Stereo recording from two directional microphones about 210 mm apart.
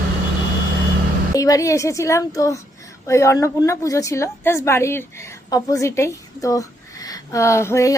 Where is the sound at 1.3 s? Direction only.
15° left (ahead or behind).